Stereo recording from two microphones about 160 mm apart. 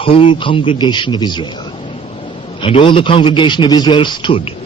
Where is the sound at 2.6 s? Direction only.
35° left (ahead or behind).